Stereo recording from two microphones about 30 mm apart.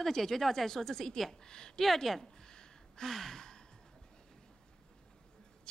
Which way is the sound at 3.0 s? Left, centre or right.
Centre.